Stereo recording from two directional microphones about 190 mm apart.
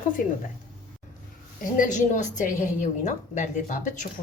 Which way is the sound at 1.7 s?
45° left (ahead or behind).